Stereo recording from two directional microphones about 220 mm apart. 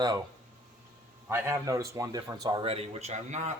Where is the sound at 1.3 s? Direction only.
10° right (ahead or behind); by 3.5 s 30° right (ahead or behind).